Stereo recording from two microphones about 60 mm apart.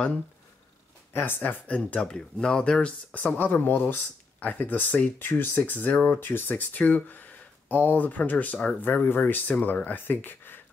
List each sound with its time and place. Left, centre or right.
1.1 s speech: left
1.7 s speech: left